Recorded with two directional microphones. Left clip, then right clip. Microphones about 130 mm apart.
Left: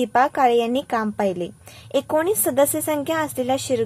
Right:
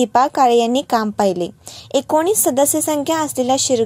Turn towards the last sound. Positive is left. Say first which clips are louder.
# right 5 dB
turn(degrees=-35)  # may be behind; listen again after turning